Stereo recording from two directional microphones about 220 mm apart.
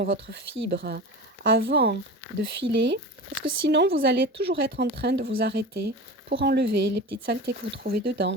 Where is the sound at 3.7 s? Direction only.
50° right (ahead or behind).